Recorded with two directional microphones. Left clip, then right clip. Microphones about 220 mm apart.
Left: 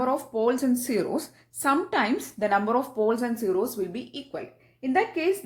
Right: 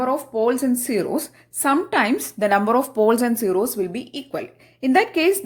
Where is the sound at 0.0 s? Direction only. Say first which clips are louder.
Right 4 dB; 15° right (ahead or behind).